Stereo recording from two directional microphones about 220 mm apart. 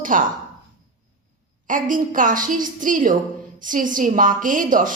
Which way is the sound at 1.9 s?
35° right (ahead or behind).